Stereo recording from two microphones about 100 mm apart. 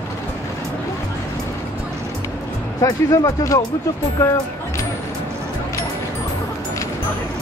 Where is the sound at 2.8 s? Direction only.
35° left (ahead or behind).